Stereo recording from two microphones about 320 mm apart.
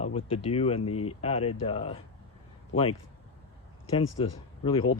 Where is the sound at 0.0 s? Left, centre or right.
Centre.